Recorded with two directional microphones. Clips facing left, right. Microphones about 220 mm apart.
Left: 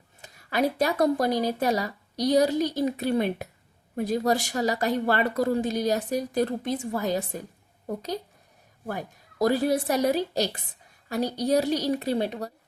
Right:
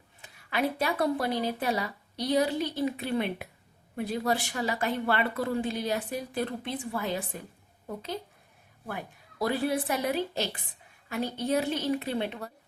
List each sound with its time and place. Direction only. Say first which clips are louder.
0.2 s a woman's voice: left 4 dB; 40° left (ahead or behind)